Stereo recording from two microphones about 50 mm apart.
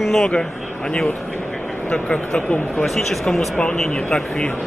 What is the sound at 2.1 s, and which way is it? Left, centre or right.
Speech, left.